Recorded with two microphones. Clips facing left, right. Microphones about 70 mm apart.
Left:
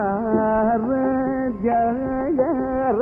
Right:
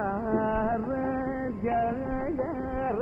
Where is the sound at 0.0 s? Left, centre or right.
Left.